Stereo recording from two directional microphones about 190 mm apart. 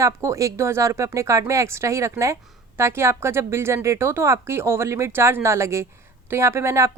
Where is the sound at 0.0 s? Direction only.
15° right (ahead or behind).